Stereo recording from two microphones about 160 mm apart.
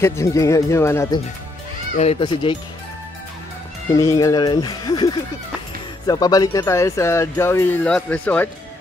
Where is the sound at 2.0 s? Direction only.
35° left (ahead or behind).